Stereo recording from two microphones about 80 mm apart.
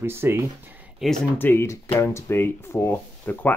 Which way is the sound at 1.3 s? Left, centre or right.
Left.